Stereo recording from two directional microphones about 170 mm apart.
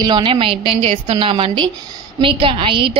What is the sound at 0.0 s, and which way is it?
A woman's voice, 25° right (ahead or behind).